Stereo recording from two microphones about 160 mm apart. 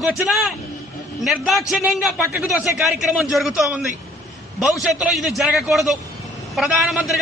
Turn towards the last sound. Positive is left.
turn(degrees=-5)  # may be behind; listen again after turning